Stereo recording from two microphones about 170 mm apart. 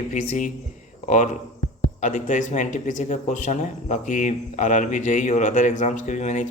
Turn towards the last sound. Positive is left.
turn(degrees=45)  # may be behind; listen again after turning